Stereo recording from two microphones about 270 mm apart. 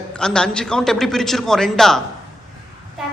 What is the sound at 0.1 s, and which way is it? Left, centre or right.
A woman's voice, centre.